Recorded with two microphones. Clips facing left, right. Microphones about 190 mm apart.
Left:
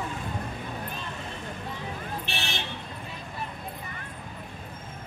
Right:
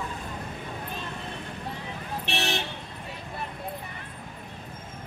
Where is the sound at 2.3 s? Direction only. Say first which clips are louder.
Right 5 dB; 70° right (ahead or behind).